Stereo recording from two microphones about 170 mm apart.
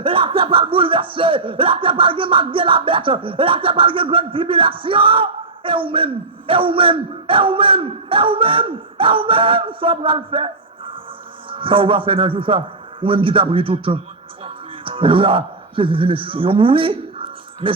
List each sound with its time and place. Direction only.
0.0 s speech: 30° right (ahead or behind)
14.4 s music: 30° right (ahead or behind)